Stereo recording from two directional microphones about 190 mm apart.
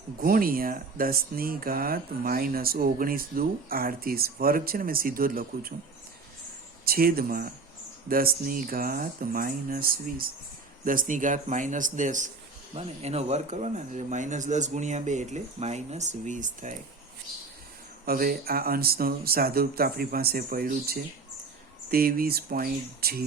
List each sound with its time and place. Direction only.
0.2 s speech: 50° right (ahead or behind)
6.8 s speech: 50° right (ahead or behind)
18.0 s speech: 50° right (ahead or behind)